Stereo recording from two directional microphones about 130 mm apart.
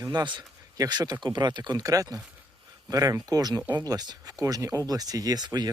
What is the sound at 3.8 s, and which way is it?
Speech, 30° right (ahead or behind).